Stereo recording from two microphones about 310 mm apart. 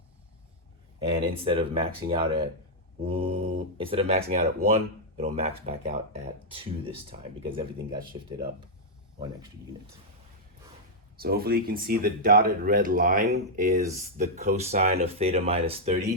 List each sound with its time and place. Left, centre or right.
1.1 s speech: centre
11.2 s speech: right